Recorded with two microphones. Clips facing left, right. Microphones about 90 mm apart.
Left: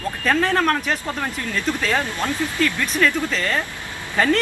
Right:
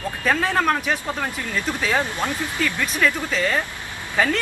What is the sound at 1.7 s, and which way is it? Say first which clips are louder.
Speech: left 1 dB; 15° right (ahead or behind).